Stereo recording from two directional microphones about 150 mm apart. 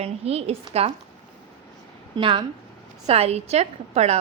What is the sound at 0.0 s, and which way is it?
Speech, 45° right (ahead or behind).